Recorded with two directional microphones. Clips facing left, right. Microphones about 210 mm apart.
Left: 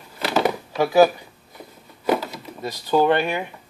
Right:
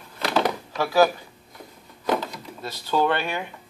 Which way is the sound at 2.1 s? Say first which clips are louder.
Left 3 dB; 10° left (ahead or behind).